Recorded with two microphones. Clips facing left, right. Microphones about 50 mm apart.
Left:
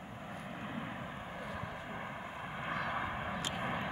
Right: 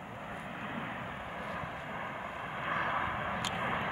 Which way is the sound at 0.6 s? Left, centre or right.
Right.